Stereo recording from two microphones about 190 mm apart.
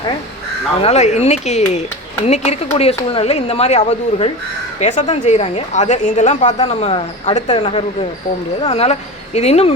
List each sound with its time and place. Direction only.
0.8 s a woman's voice: 35° left (ahead or behind)